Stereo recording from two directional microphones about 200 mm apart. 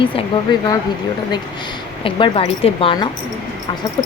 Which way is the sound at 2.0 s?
30° left (ahead or behind).